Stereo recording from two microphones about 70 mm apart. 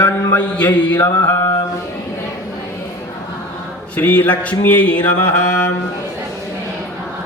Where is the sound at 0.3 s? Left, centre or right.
Left.